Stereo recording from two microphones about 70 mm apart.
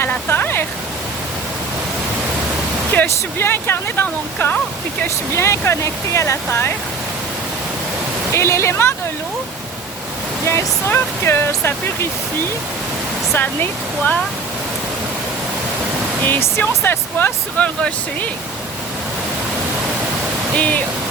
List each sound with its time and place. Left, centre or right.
0.1 s waterfall: left
2.9 s speech: left
5.3 s speech: left
8.3 s speech: left
10.4 s speech: left
13.3 s speech: left
16.2 s speech: left
17.6 s speech: centre
20.6 s speech: left